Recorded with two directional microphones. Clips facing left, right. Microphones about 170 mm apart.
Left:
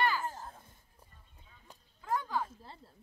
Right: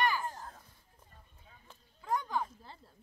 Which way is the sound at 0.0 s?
15° right (ahead or behind).